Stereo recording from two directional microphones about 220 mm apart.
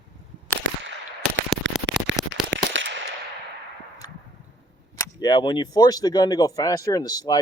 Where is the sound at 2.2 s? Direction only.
15° right (ahead or behind).